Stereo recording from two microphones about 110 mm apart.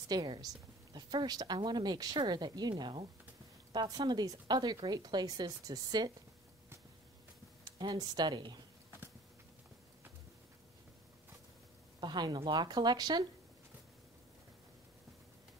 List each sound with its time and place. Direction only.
0.1 s a woman's voice: 35° right (ahead or behind)
7.8 s a woman's voice: 35° right (ahead or behind)
12.0 s a woman's voice: 40° right (ahead or behind)